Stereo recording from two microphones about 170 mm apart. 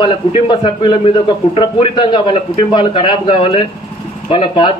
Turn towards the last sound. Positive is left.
turn(degrees=30)  # may be behind; listen again after turning